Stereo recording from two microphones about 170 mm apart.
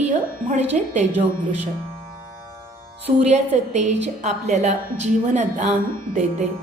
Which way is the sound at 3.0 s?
40° right (ahead or behind).